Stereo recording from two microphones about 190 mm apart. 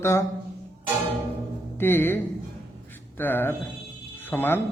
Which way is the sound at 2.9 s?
10° left (ahead or behind).